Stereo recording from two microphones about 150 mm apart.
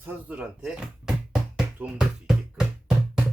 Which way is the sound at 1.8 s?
5° right (ahead or behind).